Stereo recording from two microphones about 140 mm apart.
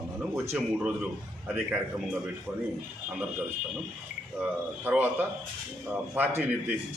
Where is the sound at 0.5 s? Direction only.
10° right (ahead or behind).